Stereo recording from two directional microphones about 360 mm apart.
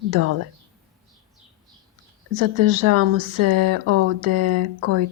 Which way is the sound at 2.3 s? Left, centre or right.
Right.